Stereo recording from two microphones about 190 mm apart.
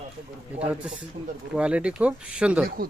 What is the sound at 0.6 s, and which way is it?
Speech, 5° right (ahead or behind).